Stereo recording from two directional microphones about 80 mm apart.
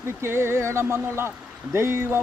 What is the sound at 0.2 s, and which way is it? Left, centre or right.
Speech, right.